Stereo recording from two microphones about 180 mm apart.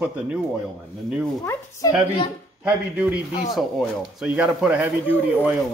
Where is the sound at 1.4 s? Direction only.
20° left (ahead or behind).